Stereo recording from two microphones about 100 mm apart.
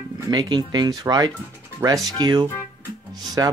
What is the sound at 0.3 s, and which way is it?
Speech, 45° right (ahead or behind).